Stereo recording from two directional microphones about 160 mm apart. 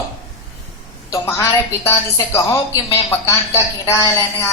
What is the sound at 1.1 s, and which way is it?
A woman's voice, 15° left (ahead or behind).